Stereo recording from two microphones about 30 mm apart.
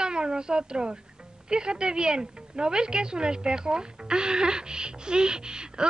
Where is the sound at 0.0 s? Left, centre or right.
Right.